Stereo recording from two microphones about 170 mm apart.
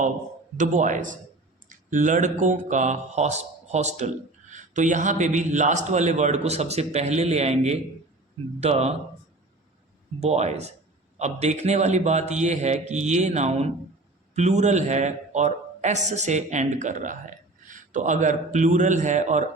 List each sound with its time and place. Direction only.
0.5 s a man's voice: 45° right (ahead or behind)
10.2 s a man's voice: 40° right (ahead or behind)